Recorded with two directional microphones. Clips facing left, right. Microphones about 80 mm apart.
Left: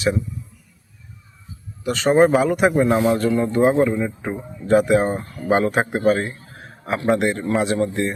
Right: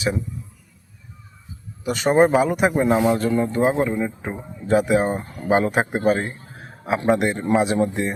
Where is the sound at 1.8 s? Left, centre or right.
Centre.